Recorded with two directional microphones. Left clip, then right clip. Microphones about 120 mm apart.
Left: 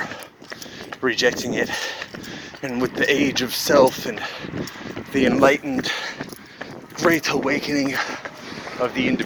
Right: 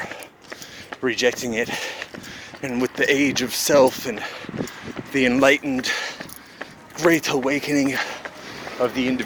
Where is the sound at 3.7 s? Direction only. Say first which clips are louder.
Left 1 dB; 40° right (ahead or behind).